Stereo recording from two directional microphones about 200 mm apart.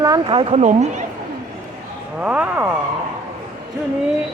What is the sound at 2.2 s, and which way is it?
Speech, 5° right (ahead or behind).